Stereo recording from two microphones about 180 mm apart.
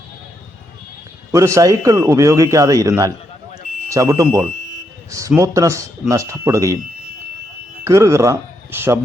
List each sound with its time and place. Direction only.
1.3 s a man's voice: 15° right (ahead or behind)
7.9 s speech: 15° right (ahead or behind)